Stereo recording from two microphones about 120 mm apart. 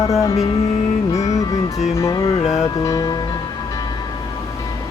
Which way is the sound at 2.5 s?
30° left (ahead or behind).